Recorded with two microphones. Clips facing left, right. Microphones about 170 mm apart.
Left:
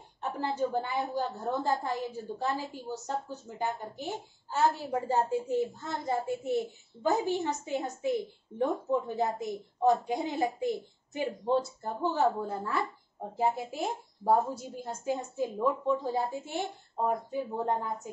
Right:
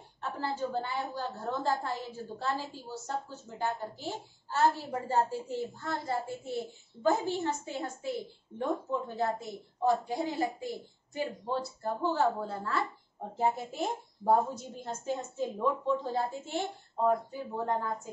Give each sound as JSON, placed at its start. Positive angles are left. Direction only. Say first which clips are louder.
{"t": 0.2, "sound": "a woman's voice", "louder": "left 3 dB", "side_deg": 15}
{"t": 14.2, "sound": "a woman's voice", "louder": "even", "side_deg": 10}